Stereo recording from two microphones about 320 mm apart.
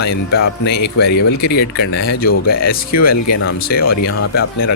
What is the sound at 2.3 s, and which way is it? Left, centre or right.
Speech, left.